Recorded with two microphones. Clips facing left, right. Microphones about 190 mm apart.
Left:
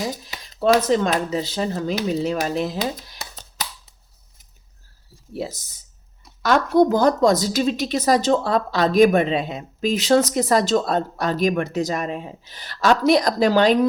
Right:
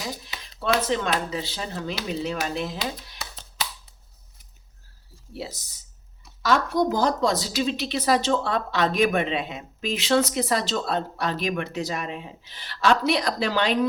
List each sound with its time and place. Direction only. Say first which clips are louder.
0.3 s speech: left 8 dB; 40° left (ahead or behind)
5.3 s a woman's voice: left 6 dB; 45° left (ahead or behind)